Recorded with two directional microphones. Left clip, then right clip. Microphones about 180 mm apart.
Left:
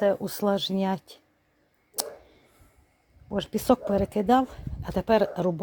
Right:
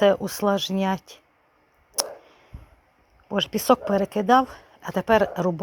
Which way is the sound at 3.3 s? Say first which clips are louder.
Right 4 dB; 5° left (ahead or behind).